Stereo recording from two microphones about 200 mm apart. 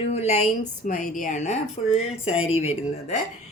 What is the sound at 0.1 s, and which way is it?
Speech, 30° left (ahead or behind).